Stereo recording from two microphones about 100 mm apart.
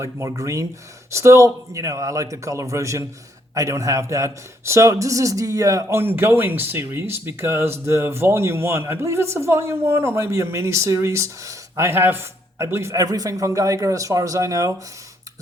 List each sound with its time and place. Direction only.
0.0 s a man's voice: 30° right (ahead or behind)
6.0 s speech: 20° right (ahead or behind)